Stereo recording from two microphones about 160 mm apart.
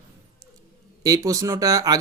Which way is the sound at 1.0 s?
20° right (ahead or behind).